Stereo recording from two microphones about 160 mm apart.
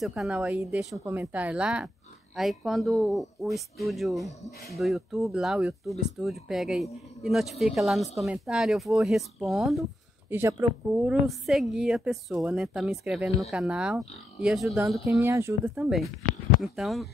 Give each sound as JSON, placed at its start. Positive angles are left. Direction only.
{"t": 0.0, "sound": "speech", "side_deg": 0}
{"t": 10.3, "sound": "speech", "side_deg": -10}
{"t": 15.1, "sound": "speech", "side_deg": -20}
{"t": 16.6, "sound": "speech", "side_deg": 0}